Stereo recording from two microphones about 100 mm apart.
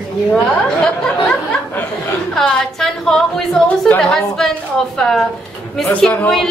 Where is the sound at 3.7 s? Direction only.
15° left (ahead or behind).